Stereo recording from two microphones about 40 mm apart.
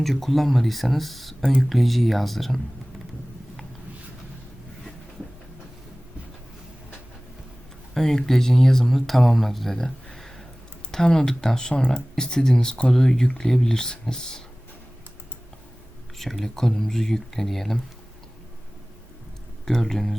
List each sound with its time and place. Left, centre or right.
0.0 s speech: centre
7.9 s speech: centre
16.1 s speech: centre
19.6 s speech: centre